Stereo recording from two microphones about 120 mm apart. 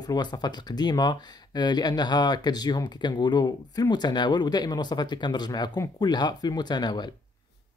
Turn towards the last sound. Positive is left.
turn(degrees=35)  # may be behind; listen again after turning